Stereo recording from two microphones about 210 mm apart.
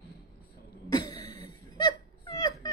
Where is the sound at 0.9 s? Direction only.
20° left (ahead or behind).